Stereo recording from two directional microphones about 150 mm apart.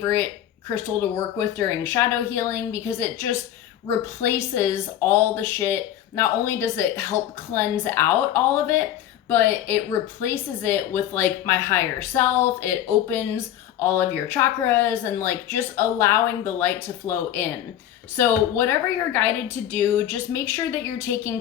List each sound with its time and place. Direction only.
0.0 s a woman's voice: 15° left (ahead or behind)
1.4 s a woman's voice: 15° left (ahead or behind)